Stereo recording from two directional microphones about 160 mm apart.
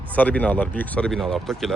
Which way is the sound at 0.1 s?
10° left (ahead or behind).